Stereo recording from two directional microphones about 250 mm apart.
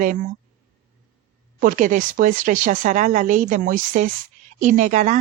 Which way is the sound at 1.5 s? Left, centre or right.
Right.